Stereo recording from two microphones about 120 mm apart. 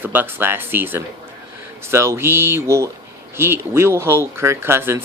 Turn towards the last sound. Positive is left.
turn(degrees=-20)  # may be behind; listen again after turning